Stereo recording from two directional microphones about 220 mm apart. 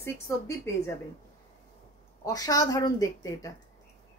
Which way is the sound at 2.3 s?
15° left (ahead or behind).